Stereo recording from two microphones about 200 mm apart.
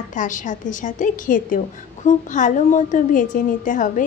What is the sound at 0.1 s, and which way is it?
A woman's voice, 40° left (ahead or behind).